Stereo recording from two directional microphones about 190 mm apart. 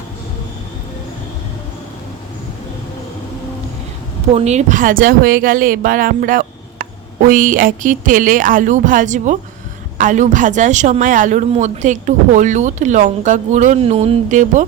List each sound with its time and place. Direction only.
4.4 s speech: 35° right (ahead or behind)